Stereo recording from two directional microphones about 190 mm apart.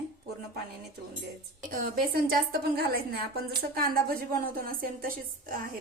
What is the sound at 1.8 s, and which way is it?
A woman's voice, 50° right (ahead or behind).